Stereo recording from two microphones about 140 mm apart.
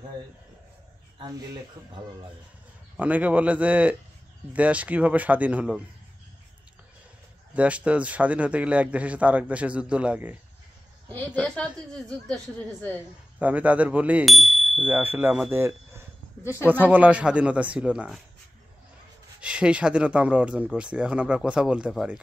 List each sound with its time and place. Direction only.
3.0 s speech: 10° right (ahead or behind)
7.5 s speech: 10° right (ahead or behind)
11.1 s a woman's voice: 15° left (ahead or behind)
13.4 s speech: 10° right (ahead or behind)
19.4 s speech: 5° right (ahead or behind)